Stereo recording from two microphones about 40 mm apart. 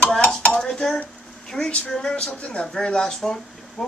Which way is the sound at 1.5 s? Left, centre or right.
Left.